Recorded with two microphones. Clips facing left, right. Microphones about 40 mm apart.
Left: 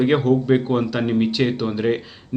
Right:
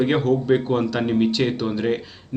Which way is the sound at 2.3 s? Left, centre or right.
Centre.